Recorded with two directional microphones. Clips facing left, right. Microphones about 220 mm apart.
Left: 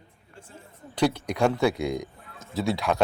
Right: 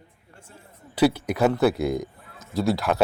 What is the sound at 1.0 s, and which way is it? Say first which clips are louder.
Speech: right 3 dB; 5° right (ahead or behind).